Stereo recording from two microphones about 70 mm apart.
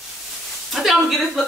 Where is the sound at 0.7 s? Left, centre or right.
Centre.